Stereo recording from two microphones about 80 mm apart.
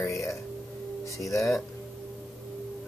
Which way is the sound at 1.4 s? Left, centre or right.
Centre.